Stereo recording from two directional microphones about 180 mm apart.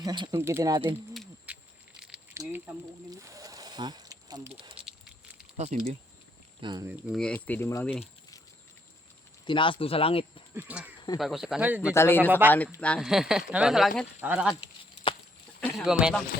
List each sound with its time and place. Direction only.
0.0 s speech: 25° right (ahead or behind)
1.1 s insect: centre (ahead or behind)
2.0 s a sound: 5° right (ahead or behind)
2.3 s a sound: 15° right (ahead or behind)
3.1 s snake: 20° right (ahead or behind)
5.5 s speech: 40° right (ahead or behind)
6.6 s speech: 25° right (ahead or behind)
7.1 s speech: 5° left (ahead or behind)
9.5 s speech: 30° left (ahead or behind)
10.5 s speech: 10° right (ahead or behind)
11.9 s speech: 15° left (ahead or behind)
14.2 s speech: 5° right (ahead or behind)
14.5 s a sound: 30° left (ahead or behind)
15.7 s speech: 5° right (ahead or behind)